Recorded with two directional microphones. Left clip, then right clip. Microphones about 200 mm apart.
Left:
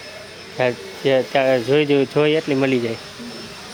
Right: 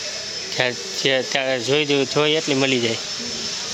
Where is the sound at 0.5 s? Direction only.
Centre (ahead or behind).